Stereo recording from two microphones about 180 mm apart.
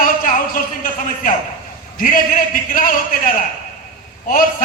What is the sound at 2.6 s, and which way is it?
Speech, 55° left (ahead or behind).